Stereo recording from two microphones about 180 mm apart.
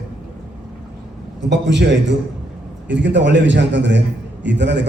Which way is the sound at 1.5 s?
80° right.